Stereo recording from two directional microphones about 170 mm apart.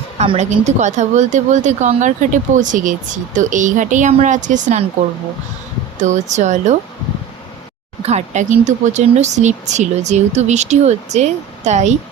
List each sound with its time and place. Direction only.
0.2 s a woman's voice: 40° right (ahead or behind)
6.0 s a woman's voice: 45° right (ahead or behind)
8.0 s a woman's voice: 40° right (ahead or behind)